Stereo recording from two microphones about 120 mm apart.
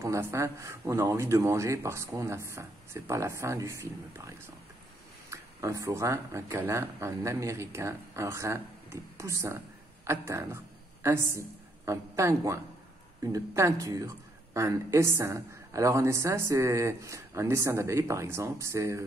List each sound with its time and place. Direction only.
0.0 s a woman's voice: 25° right (ahead or behind)